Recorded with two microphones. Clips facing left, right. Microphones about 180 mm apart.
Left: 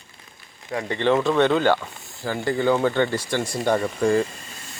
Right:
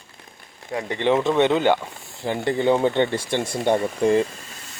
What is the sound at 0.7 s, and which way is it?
Speech, 15° right (ahead or behind).